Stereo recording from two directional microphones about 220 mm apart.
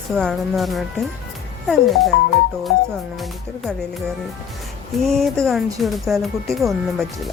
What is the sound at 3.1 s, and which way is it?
Speech, centre (ahead or behind).